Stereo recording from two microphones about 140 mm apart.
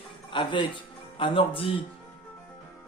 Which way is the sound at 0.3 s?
35° left (ahead or behind).